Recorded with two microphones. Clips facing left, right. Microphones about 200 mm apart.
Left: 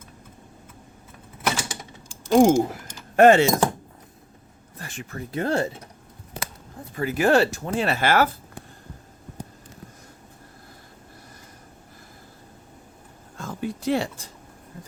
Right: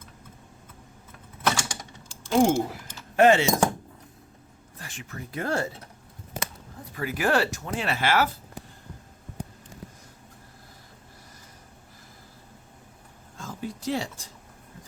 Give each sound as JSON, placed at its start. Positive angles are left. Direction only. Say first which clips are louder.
{"t": 1.5, "sound": "typing", "louder": "even", "side_deg": 10}
{"t": 2.3, "sound": "speech", "louder": "left 5 dB", "side_deg": 45}
{"t": 4.8, "sound": "a sound", "louder": "left 5 dB", "side_deg": 55}
{"t": 5.0, "sound": "speech", "louder": "left 4 dB", "side_deg": 30}
{"t": 6.9, "sound": "speech", "louder": "left 5 dB", "side_deg": 25}
{"t": 13.3, "sound": "speech", "louder": "left 5 dB", "side_deg": 65}